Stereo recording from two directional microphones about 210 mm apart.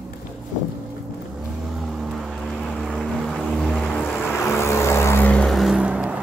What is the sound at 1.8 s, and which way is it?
Vehicle, centre (ahead or behind).